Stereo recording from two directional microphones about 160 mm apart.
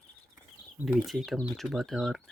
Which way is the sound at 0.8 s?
5° right (ahead or behind).